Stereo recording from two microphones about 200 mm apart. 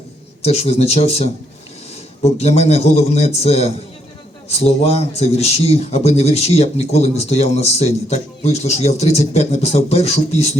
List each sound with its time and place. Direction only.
0.4 s speech: 30° left (ahead or behind)